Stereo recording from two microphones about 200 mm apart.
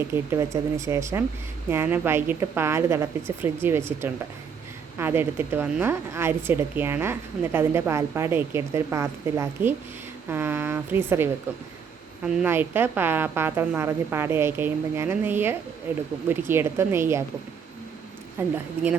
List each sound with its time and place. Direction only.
0.1 s speech: 15° right (ahead or behind)
18.3 s speech: 10° right (ahead or behind)